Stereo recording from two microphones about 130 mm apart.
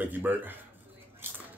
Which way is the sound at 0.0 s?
15° right (ahead or behind).